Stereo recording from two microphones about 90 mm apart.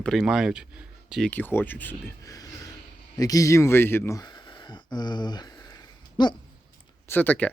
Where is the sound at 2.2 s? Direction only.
45° left (ahead or behind).